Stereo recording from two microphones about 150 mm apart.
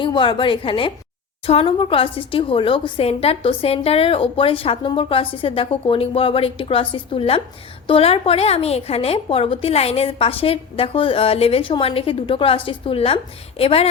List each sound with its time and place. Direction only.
0.0 s a woman's voice: 30° left (ahead or behind)